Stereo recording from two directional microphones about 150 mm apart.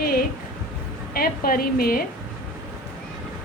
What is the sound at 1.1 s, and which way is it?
Speech, 75° left (ahead or behind).